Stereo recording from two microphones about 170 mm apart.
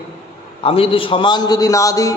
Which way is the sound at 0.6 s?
35° left (ahead or behind).